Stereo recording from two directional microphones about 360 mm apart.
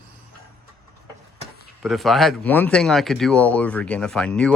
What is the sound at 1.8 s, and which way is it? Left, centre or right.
Speech, centre.